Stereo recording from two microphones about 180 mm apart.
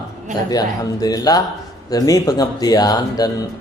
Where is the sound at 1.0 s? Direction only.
20° left (ahead or behind).